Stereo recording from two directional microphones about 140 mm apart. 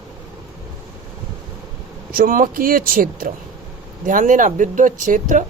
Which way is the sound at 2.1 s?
85° right.